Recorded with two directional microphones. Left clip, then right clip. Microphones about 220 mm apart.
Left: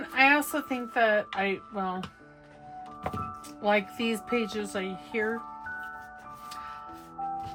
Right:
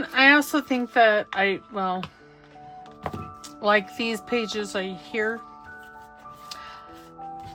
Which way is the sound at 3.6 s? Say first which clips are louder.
Right 5 dB; 20° right (ahead or behind).